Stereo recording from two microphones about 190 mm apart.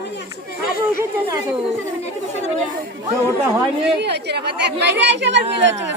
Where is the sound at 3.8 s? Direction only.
60° right (ahead or behind).